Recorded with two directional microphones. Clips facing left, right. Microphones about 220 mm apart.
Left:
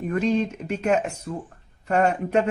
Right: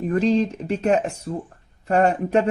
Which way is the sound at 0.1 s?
35° right (ahead or behind).